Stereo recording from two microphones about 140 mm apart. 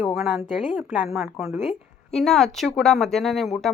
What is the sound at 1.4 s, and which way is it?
Speech, 15° right (ahead or behind).